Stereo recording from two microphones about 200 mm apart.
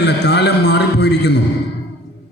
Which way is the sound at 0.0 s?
55° left (ahead or behind).